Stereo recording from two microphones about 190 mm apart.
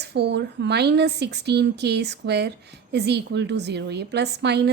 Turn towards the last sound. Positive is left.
turn(degrees=-60)  # may be behind; listen again after turning